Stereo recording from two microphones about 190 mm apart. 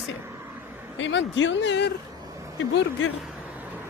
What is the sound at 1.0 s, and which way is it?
Speech, 75° left (ahead or behind).